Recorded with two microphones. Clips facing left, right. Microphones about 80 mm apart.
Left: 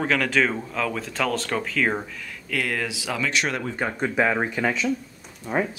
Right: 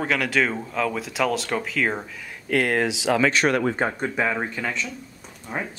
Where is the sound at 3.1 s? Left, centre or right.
Right.